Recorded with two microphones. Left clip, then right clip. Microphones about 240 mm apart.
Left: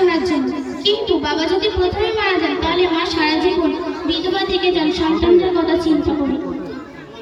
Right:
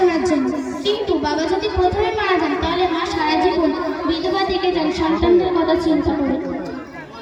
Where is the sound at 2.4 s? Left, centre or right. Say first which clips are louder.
Left 2 dB; centre.